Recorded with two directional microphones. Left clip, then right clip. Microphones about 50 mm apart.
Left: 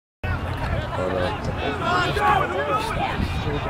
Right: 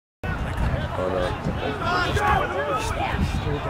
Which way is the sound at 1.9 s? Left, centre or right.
Centre.